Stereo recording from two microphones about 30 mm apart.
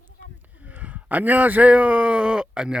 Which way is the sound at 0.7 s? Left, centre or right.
Right.